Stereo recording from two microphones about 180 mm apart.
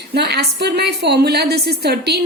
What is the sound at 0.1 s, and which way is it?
A woman's voice, 65° right (ahead or behind).